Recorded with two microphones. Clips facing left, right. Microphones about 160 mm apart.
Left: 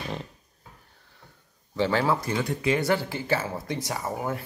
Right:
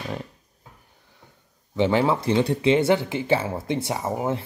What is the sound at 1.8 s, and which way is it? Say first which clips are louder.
Speech: right 4 dB; 20° right (ahead or behind).